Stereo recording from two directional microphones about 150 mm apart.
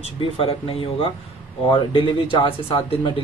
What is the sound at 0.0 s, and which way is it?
Speech, 40° left (ahead or behind).